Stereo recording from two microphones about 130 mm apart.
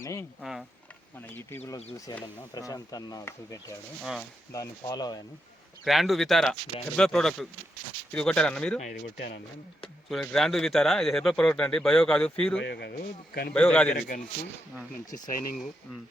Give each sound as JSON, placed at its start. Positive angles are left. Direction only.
{"t": 0.0, "sound": "speech", "side_deg": 25}
{"t": 1.3, "sound": "speech", "side_deg": 15}
{"t": 4.0, "sound": "speech", "side_deg": 0}
{"t": 4.5, "sound": "speech", "side_deg": 25}
{"t": 5.8, "sound": "speech", "side_deg": 0}
{"t": 9.8, "sound": "speech", "side_deg": 5}
{"t": 15.1, "sound": "speech", "side_deg": 90}